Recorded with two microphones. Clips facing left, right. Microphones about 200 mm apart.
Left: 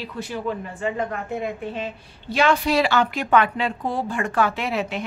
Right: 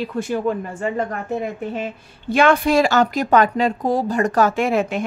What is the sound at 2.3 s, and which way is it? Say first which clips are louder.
Speech: right 4 dB; 50° right (ahead or behind).